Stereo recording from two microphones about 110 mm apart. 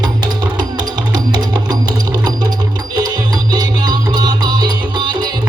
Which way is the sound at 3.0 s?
40° right (ahead or behind).